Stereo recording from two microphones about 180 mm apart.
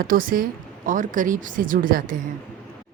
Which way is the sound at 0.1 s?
50° right (ahead or behind).